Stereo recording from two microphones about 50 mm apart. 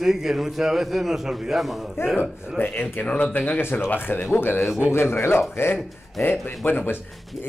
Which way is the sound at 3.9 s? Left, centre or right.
Left.